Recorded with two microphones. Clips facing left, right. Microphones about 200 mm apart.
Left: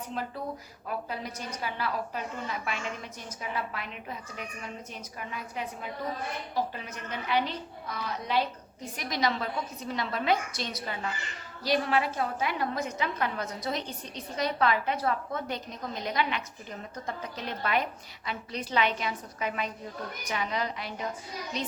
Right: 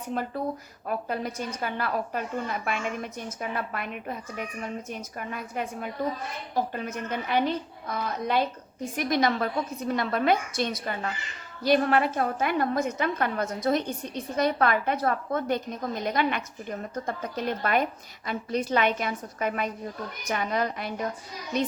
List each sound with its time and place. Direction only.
0.9 s a woman's voice: 50° right (ahead or behind)